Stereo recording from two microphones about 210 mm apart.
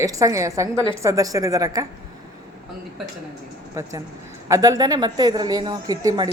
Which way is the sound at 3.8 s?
15° right (ahead or behind).